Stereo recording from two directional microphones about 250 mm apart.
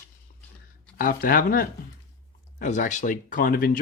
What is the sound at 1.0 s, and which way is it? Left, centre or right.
Speech, left.